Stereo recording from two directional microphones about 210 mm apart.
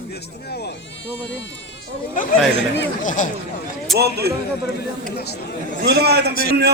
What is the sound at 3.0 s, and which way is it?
Speech, 40° left (ahead or behind).